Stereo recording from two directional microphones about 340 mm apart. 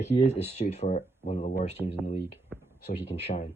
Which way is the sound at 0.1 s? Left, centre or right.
Centre.